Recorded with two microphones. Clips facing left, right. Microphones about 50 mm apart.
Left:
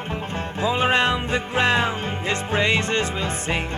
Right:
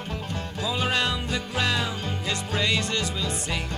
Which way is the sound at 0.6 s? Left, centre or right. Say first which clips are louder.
Left 6 dB; left.